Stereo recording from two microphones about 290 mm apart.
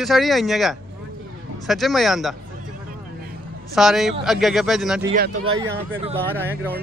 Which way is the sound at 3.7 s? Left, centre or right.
Centre.